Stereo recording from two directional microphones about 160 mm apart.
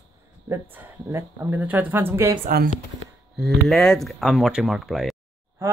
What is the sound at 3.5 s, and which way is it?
Speech, centre (ahead or behind).